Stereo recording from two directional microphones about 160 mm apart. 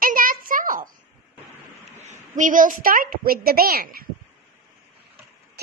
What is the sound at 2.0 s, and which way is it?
A woman's voice, 50° right (ahead or behind).